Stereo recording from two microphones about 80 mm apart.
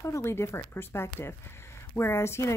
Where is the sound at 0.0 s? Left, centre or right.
Left.